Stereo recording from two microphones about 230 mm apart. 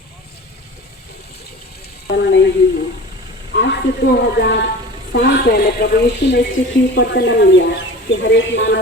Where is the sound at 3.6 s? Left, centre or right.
Left.